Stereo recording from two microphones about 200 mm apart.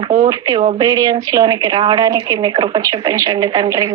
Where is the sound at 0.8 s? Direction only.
20° right (ahead or behind).